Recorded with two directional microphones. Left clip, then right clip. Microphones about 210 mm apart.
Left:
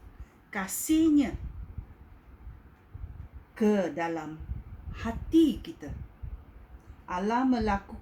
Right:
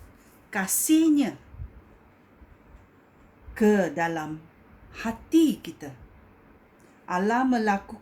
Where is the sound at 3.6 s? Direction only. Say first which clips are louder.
Right 5 dB; 45° right (ahead or behind).